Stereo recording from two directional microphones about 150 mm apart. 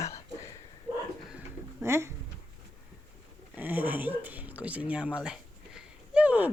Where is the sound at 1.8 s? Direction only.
20° right (ahead or behind).